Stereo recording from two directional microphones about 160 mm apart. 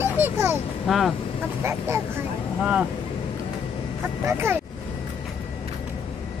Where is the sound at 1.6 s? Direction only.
15° right (ahead or behind).